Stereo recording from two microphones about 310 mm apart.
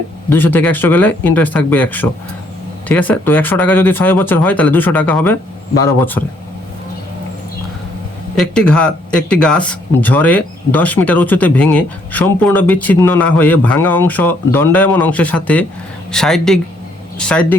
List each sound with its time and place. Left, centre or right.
0.3 s speech: centre
8.4 s speech: centre